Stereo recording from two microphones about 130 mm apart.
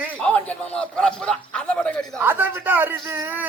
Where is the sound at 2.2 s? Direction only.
15° right (ahead or behind).